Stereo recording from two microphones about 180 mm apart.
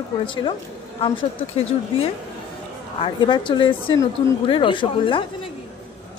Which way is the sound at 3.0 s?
25° left (ahead or behind).